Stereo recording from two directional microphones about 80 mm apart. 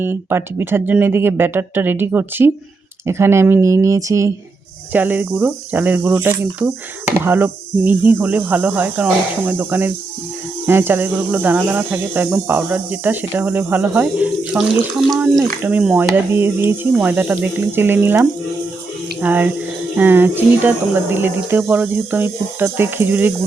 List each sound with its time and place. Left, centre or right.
0.0 s speech: right
4.9 s speech: right
14.6 s speech: centre
15.6 s speech: right
19.2 s speech: right